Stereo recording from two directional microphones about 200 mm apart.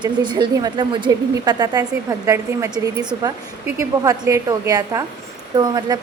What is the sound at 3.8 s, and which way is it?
A woman's voice, 15° right (ahead or behind).